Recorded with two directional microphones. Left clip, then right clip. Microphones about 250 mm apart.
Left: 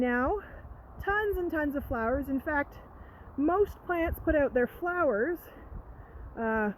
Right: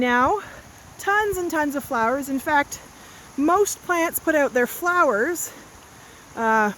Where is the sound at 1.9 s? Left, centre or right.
Right.